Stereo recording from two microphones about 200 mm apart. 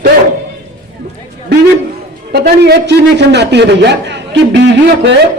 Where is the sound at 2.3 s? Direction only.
55° right (ahead or behind).